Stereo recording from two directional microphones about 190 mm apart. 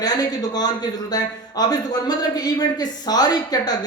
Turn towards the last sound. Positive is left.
turn(degrees=20)  # may be behind; listen again after turning